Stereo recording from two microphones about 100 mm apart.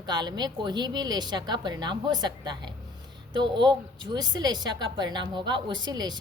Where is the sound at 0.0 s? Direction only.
45° right (ahead or behind).